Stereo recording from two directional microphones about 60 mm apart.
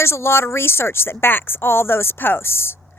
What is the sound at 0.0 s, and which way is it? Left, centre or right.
Speech, left.